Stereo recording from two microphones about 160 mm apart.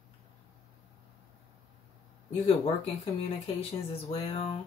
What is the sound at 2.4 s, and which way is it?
Speech, 40° left (ahead or behind).